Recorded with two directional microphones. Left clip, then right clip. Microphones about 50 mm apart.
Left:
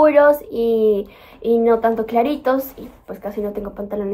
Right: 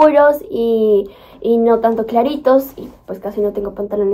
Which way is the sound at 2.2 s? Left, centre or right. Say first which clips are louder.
Right 6 dB; centre.